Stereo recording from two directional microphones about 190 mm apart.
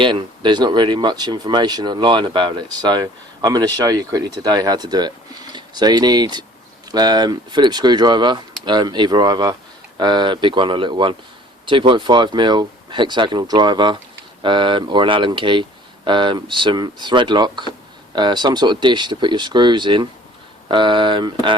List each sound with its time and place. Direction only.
0.0 s speech: 25° right (ahead or behind)